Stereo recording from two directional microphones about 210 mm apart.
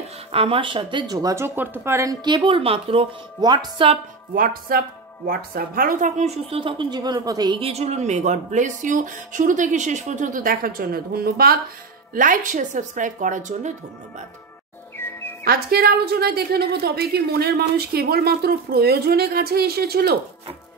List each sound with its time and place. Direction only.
0.3 s speech: 25° right (ahead or behind)
4.4 s a woman's voice: 45° right (ahead or behind)
15.4 s a woman's voice: 45° right (ahead or behind)